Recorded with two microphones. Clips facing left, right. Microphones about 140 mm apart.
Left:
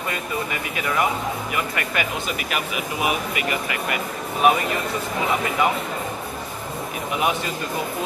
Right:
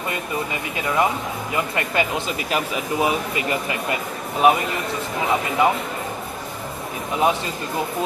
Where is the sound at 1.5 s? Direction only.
25° right (ahead or behind).